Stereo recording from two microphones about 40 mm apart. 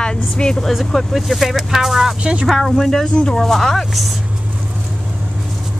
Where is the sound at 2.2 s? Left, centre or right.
Right.